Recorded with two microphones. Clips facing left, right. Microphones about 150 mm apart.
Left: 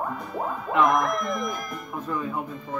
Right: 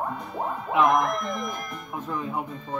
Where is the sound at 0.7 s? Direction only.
Centre (ahead or behind).